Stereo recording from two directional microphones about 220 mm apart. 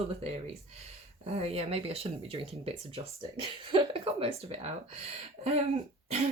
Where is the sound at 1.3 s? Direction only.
25° right (ahead or behind).